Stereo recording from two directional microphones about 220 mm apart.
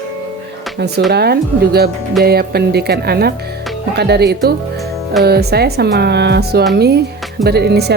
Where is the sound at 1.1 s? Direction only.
45° right (ahead or behind).